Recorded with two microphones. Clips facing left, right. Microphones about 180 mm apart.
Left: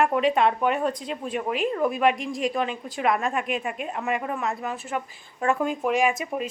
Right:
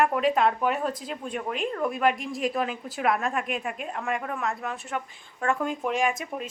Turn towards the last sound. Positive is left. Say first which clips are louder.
# left 3 dB
turn(degrees=5)  # may be behind; listen again after turning